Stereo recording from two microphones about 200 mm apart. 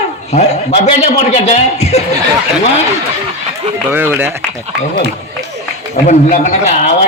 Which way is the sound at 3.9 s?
10° right (ahead or behind).